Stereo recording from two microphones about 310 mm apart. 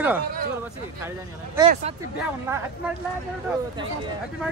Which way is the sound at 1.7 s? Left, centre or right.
Right.